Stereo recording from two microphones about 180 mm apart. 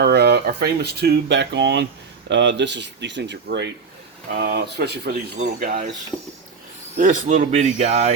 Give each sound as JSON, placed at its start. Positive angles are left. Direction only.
{"t": 0.0, "sound": "speech", "side_deg": -65}
{"t": 4.4, "sound": "speech", "side_deg": -55}
{"t": 5.4, "sound": "speech", "side_deg": -50}
{"t": 6.1, "sound": "speech", "side_deg": 5}
{"t": 6.9, "sound": "speech", "side_deg": -45}